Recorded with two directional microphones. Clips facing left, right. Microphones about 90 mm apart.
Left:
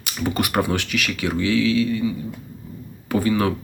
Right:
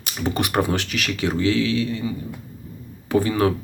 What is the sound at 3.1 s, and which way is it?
Speech, 30° right (ahead or behind).